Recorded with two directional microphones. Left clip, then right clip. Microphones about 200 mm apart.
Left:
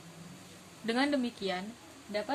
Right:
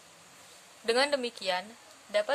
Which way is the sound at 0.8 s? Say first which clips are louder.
Right 4 dB; 40° right (ahead or behind).